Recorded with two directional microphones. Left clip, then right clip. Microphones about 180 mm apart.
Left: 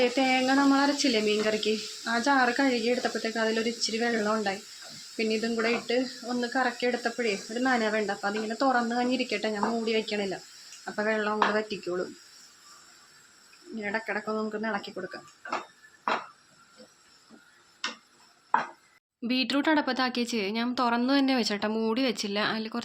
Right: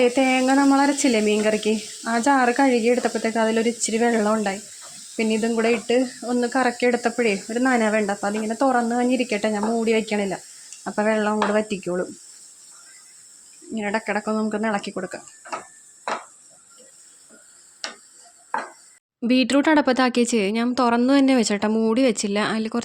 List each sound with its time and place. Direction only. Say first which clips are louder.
0.0 s speech: right 6 dB; 45° right (ahead or behind)
13.7 s speech: right 7 dB; 50° right (ahead or behind)
19.2 s speech: right 8 dB; 45° right (ahead or behind)